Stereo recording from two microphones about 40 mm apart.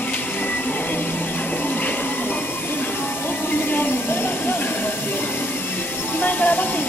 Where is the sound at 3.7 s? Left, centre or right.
Left.